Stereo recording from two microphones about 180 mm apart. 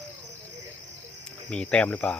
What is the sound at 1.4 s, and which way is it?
Speech, 5° left (ahead or behind).